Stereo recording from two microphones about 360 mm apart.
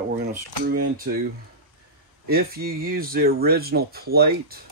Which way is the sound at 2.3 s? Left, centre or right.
Right.